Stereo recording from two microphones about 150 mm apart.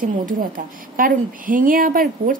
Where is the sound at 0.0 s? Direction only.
65° right (ahead or behind).